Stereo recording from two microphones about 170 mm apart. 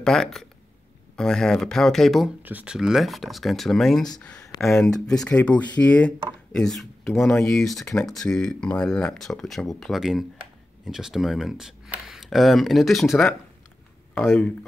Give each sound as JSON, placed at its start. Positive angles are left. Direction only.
{"t": 0.0, "sound": "speech", "side_deg": 5}
{"t": 7.2, "sound": "speech", "side_deg": 15}
{"t": 7.4, "sound": "speech", "side_deg": 0}